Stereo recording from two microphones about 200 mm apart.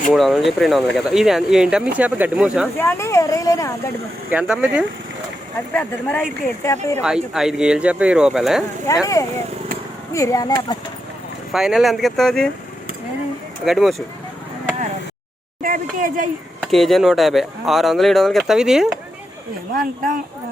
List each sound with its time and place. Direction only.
0.1 s speech: centre (ahead or behind)
2.7 s speech: 15° left (ahead or behind)
4.3 s speech: 5° right (ahead or behind)
5.7 s speech: 5° left (ahead or behind)
7.0 s speech: 5° right (ahead or behind)
8.9 s speech: 15° left (ahead or behind)
10.1 s speech: 15° left (ahead or behind)
11.5 s speech: centre (ahead or behind)
13.7 s speech: centre (ahead or behind)
15.6 s speech: 45° right (ahead or behind)
16.6 s speech: centre (ahead or behind)
19.7 s speech: 45° right (ahead or behind)